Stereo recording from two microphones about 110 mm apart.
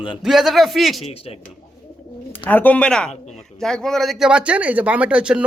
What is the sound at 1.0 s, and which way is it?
Speech, 65° left (ahead or behind).